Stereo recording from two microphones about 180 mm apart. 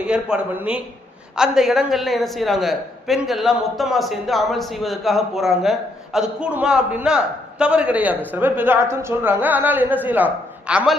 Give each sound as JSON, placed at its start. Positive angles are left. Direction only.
{"t": 0.0, "sound": "a woman's voice", "side_deg": -5}